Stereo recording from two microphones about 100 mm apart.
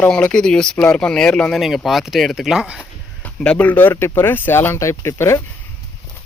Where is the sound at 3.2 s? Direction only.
10° left (ahead or behind); by 5.4 s 30° left (ahead or behind).